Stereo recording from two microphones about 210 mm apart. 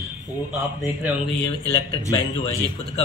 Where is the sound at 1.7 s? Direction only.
15° left (ahead or behind).